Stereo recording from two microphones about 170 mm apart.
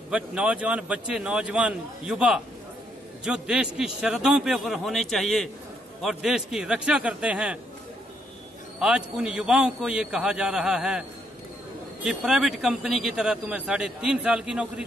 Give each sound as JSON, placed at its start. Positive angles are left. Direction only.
{"t": 0.1, "sound": "a man's voice", "side_deg": -5}
{"t": 8.7, "sound": "a man's voice", "side_deg": -5}